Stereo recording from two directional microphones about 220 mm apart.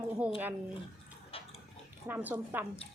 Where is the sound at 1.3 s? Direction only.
25° left (ahead or behind).